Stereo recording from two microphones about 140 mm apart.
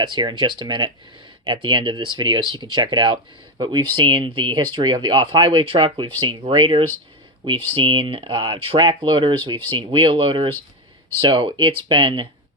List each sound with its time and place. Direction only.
0.0 s speech: 30° right (ahead or behind)